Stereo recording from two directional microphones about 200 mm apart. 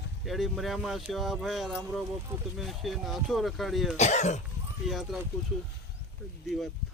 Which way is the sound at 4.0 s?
35° left (ahead or behind).